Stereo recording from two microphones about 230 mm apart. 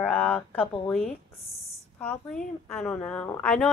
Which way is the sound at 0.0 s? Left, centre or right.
Centre.